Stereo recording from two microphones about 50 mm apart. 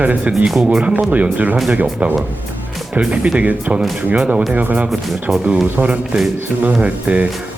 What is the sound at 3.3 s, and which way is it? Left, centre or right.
Speech, right.